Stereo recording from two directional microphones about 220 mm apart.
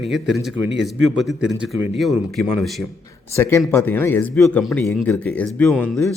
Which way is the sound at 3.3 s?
10° left (ahead or behind).